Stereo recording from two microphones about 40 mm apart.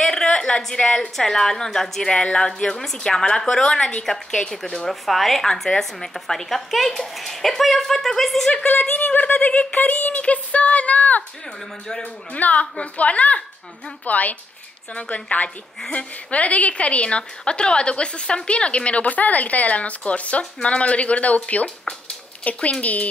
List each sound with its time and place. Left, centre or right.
0.0 s a sound: centre
0.7 s a woman's voice: left
4.0 s a woman's voice: centre
4.8 s a woman's voice: centre
8.9 s a woman's voice: left
22.4 s a woman's voice: left